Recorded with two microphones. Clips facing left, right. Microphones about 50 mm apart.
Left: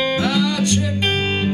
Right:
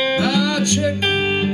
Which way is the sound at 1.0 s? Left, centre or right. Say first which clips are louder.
Right 1 dB; centre.